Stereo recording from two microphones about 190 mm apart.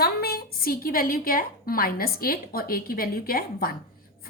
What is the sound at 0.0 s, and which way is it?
A woman's voice, 55° left (ahead or behind).